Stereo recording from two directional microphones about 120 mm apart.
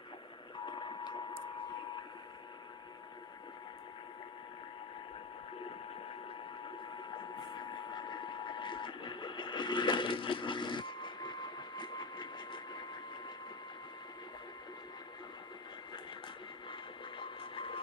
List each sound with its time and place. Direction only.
0.6 s reversing beeps: 40° left (ahead or behind)
6.9 s a sound: 40° left (ahead or behind)
17.2 s vehicle: 45° left (ahead or behind)